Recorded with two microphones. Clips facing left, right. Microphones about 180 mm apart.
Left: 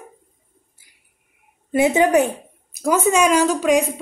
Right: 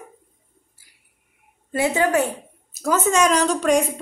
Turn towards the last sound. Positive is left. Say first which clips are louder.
# left 2 dB
turn(degrees=5)  # may be behind; listen again after turning